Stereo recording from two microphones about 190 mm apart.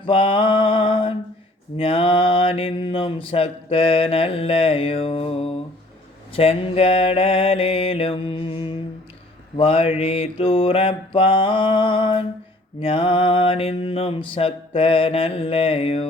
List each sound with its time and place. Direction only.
0.0 s mantra: 25° left (ahead or behind)